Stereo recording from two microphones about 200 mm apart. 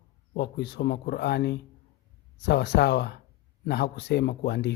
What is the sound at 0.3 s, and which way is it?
Speech, 55° left (ahead or behind).